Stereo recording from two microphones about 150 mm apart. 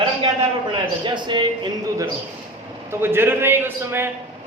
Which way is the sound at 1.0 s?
30° right (ahead or behind).